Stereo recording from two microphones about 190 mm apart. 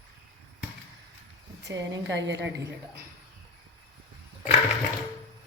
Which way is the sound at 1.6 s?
70° right (ahead or behind).